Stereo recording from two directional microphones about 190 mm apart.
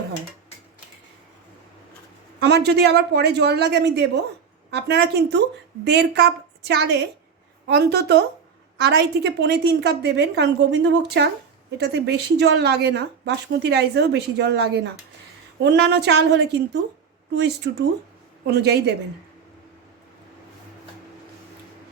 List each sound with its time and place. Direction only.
2.4 s speech: 60° right (ahead or behind)